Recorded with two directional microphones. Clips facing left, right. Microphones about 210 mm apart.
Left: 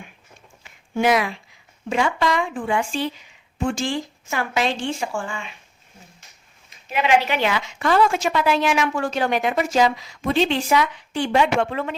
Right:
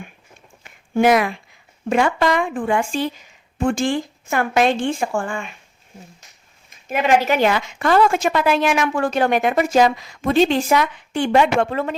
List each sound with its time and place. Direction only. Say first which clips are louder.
0.6 s a sound: right 4 dB; 50° right (ahead or behind)
1.9 s a woman's voice: right 4 dB; 55° right (ahead or behind)
6.8 s a woman's voice: right 2 dB; 45° right (ahead or behind)